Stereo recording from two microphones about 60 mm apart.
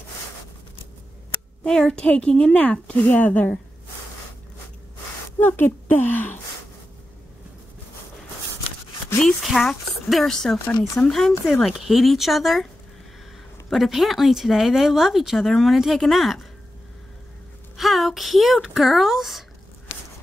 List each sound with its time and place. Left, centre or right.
1.7 s speech: centre
5.4 s a woman's voice: left
9.2 s speech: centre
13.7 s speech: centre
17.7 s speech: centre